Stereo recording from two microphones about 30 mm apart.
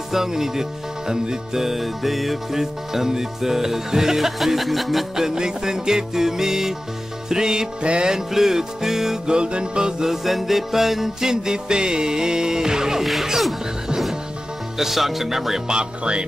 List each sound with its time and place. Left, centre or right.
0.1 s music: centre
1.6 s music: centre
2.6 s music: centre
4.4 s music: centre
5.1 s music: centre
7.8 s music: right
8.3 s music: centre
9.3 s music: right
10.0 s music: centre
13.0 s music: centre
14.8 s music: centre
16.0 s music: right